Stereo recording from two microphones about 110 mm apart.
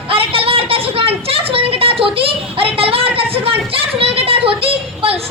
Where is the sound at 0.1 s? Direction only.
55° right (ahead or behind).